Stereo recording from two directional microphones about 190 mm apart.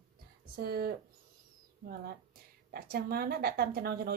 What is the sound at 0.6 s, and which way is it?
Speech, 55° right (ahead or behind).